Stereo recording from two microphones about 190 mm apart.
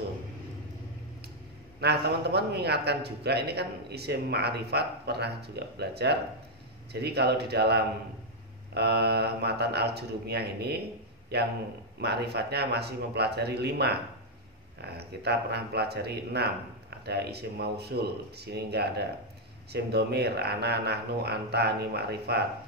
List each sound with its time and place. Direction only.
1.8 s a man's voice: 60° right (ahead or behind)